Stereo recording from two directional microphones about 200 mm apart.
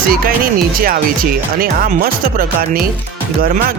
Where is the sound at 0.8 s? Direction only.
45° right (ahead or behind).